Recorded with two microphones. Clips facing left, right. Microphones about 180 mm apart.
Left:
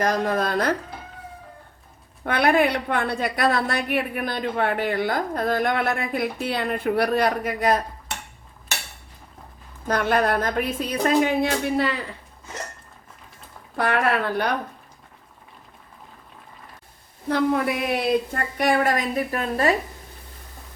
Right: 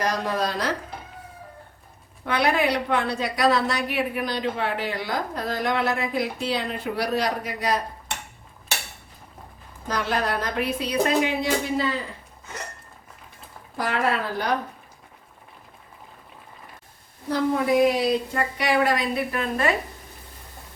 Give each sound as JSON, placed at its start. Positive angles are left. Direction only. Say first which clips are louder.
{"t": 0.0, "sound": "a woman's voice", "louder": "left 3 dB", "side_deg": 50}
{"t": 2.2, "sound": "a woman's voice", "louder": "left 3 dB", "side_deg": 55}
{"t": 9.8, "sound": "a woman's voice", "louder": "left 5 dB", "side_deg": 55}
{"t": 13.7, "sound": "a woman's voice", "louder": "left 3 dB", "side_deg": 60}
{"t": 17.2, "sound": "a woman's voice", "louder": "left 1 dB", "side_deg": 60}